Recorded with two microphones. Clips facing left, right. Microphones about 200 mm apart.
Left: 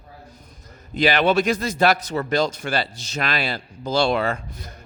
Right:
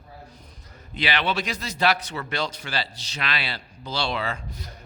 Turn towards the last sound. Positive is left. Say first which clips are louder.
# left 6 dB
turn(degrees=50)  # may be behind; listen again after turning